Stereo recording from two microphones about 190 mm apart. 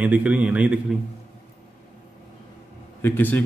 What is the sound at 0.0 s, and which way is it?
Speech, 5° right (ahead or behind).